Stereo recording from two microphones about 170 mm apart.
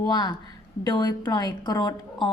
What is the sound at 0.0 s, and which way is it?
A woman's voice, 25° left (ahead or behind).